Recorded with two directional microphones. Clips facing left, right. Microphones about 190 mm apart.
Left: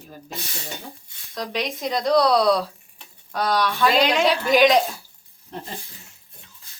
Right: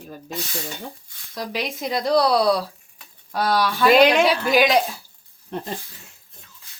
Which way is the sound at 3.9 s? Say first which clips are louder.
Right 7 dB; 55° right (ahead or behind).